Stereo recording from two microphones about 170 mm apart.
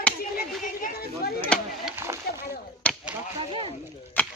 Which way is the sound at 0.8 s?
65° left (ahead or behind).